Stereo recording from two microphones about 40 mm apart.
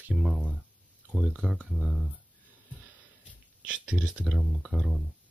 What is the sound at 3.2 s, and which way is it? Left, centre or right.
Hiccup, right.